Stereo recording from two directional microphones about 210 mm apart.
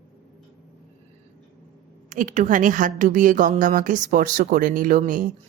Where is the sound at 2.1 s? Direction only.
35° right (ahead or behind).